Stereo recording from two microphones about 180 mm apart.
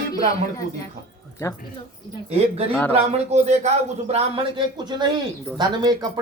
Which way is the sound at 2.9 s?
35° right (ahead or behind).